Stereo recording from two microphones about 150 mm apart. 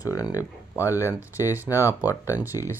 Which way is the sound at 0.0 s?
25° left (ahead or behind).